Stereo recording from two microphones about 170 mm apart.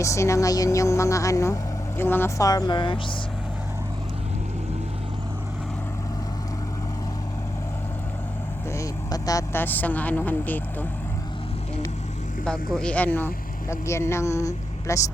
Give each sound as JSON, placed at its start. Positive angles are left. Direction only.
{"t": 0.0, "sound": "speech", "side_deg": 15}
{"t": 8.7, "sound": "speech", "side_deg": 20}
{"t": 12.5, "sound": "speech", "side_deg": 5}